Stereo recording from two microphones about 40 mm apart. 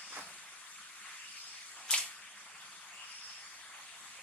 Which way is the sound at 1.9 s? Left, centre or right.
Left.